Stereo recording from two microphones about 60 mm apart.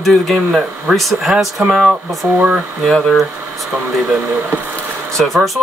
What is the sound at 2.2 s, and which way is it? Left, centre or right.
Speech, right.